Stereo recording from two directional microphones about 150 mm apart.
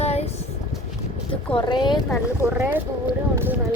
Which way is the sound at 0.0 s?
45° left (ahead or behind).